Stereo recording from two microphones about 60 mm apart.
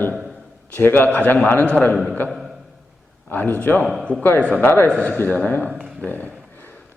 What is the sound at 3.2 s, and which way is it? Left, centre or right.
A man's voice, left.